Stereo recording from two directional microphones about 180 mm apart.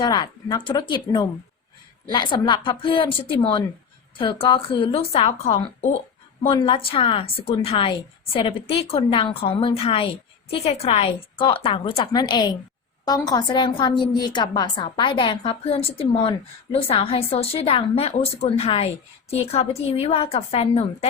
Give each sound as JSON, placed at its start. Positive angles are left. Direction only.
{"t": 0.0, "sound": "a woman's voice", "side_deg": 20}